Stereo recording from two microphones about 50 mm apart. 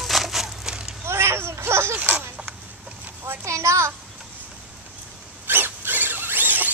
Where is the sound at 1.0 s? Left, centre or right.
Right.